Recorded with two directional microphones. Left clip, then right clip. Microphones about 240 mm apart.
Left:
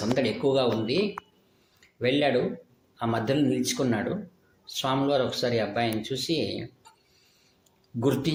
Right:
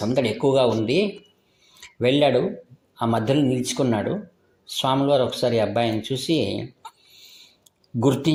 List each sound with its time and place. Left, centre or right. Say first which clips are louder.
0.2 s speech: right 6 dB; right
8.0 s speech: right 5 dB; centre